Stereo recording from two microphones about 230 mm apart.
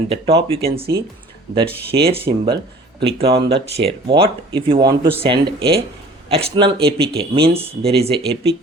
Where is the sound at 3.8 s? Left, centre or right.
Right.